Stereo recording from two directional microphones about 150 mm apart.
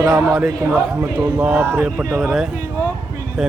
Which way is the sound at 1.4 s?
10° right (ahead or behind).